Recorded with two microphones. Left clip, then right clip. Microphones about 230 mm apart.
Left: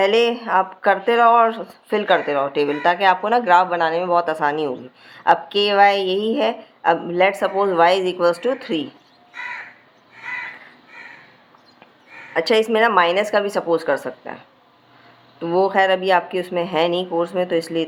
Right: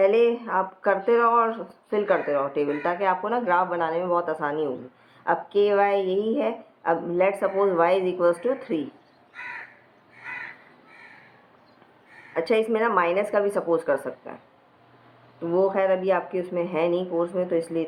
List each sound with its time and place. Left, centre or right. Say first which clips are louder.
0.0 s a woman's voice: left 3 dB; left
12.3 s a woman's voice: left 6 dB; left
15.4 s speech: left 5 dB; left